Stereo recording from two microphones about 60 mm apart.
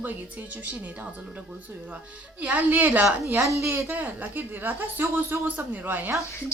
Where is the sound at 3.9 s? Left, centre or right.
Right.